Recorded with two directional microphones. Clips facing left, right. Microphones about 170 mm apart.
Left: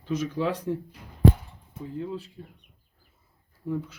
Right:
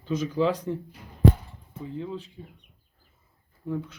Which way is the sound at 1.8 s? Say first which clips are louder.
Left 1 dB; centre (ahead or behind).